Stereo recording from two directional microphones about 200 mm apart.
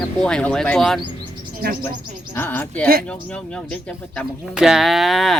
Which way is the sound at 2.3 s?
10° left (ahead or behind).